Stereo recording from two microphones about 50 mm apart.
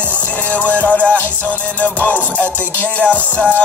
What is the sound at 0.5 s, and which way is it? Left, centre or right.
Music, left.